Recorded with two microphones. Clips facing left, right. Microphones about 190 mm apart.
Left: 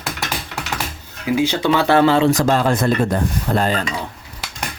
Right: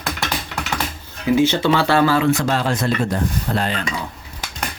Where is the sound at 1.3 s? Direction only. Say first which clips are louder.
Right 1 dB; 10° left (ahead or behind).